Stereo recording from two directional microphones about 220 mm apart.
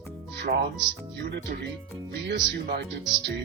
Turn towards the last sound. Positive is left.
turn(degrees=-50)  # may be behind; listen again after turning